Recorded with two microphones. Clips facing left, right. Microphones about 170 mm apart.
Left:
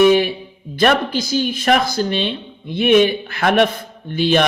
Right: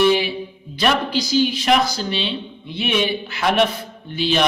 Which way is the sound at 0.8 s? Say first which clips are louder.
Left 3 dB; 50° left (ahead or behind).